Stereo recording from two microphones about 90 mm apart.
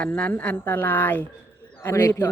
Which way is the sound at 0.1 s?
20° left (ahead or behind).